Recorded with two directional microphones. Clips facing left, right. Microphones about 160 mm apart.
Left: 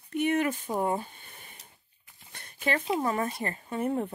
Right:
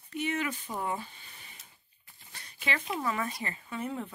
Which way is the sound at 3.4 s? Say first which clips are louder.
Left 5 dB; 45° left (ahead or behind).